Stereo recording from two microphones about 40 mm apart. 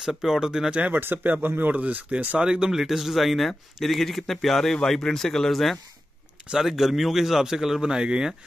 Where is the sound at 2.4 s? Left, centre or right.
Centre.